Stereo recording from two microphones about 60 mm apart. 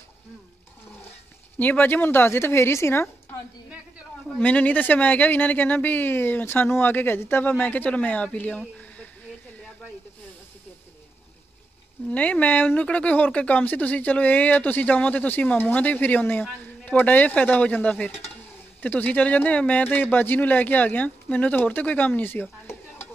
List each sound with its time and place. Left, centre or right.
1.6 s a woman's voice: left
4.4 s speech: left
12.1 s speech: left